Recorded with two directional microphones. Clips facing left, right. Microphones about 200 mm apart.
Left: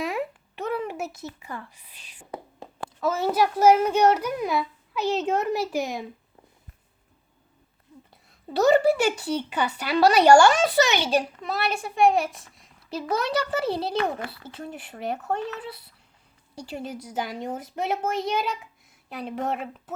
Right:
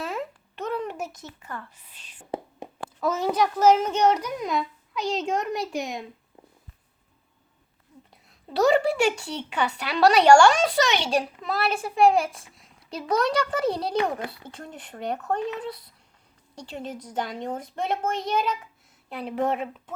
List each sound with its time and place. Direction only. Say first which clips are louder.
0.0 s a sound: left 3 dB; 15° left (ahead or behind)
2.6 s a sound: right 3 dB; 20° right (ahead or behind)
3.0 s a child's voice: left 1 dB; 5° left (ahead or behind)
8.1 s a woman's voice: left 1 dB; centre (ahead or behind)
13.9 s a child's voice: right 1 dB; 20° right (ahead or behind)
14.4 s a woman's voice: left 3 dB; 5° left (ahead or behind)
16.6 s a child's voice: left 1 dB; 5° left (ahead or behind)